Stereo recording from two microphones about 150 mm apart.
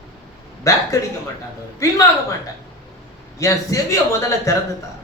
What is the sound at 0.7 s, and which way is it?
Speech, 20° left (ahead or behind).